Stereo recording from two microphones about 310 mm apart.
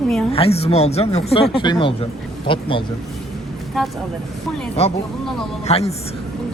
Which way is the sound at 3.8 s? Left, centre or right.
Centre.